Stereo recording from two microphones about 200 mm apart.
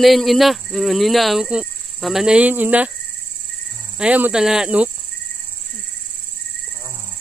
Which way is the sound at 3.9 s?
5° right (ahead or behind).